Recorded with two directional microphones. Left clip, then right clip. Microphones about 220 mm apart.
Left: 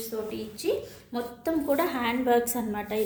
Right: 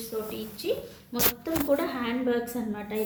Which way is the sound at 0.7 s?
40° left (ahead or behind).